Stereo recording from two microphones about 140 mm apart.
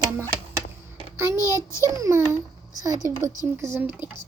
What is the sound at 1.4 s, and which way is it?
Speech, 25° left (ahead or behind).